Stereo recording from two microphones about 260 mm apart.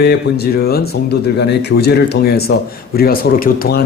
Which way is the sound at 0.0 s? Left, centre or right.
Left.